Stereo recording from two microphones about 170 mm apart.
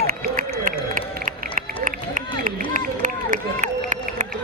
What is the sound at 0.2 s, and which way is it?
Run, 50° right (ahead or behind).